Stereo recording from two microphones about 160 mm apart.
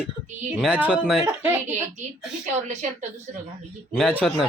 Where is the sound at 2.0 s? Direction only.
50° right (ahead or behind).